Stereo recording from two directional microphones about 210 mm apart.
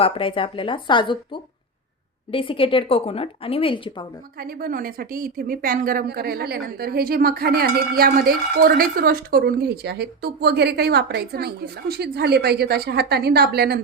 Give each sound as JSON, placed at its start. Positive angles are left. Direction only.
{"t": 0.0, "sound": "a woman's voice", "side_deg": 25}
{"t": 4.4, "sound": "a woman's voice", "side_deg": -45}